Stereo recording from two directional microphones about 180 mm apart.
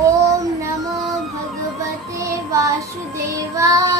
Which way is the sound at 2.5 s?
15° right (ahead or behind).